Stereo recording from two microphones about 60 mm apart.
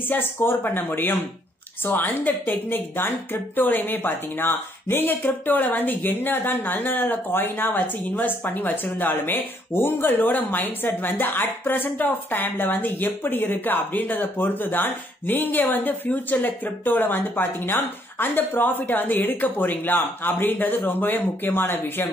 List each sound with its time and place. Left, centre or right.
0.1 s a woman's voice: left